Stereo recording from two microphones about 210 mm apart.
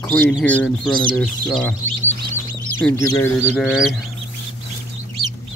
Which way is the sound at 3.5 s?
5° right (ahead or behind).